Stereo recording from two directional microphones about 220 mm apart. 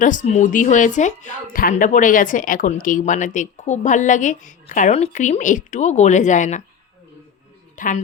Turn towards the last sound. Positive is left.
turn(degrees=35)  # may be behind; listen again after turning